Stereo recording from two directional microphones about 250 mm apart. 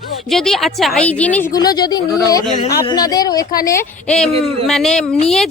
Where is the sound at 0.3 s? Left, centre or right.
Centre.